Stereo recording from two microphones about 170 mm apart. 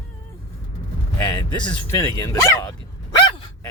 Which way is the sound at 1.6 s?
10° left (ahead or behind).